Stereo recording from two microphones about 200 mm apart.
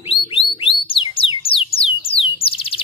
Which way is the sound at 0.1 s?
25° left (ahead or behind).